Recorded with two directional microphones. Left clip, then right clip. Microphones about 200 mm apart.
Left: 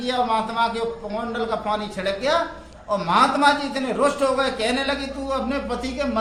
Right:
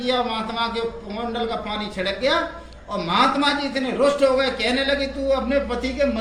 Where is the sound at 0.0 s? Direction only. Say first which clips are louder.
Left 1 dB; 25° left (ahead or behind).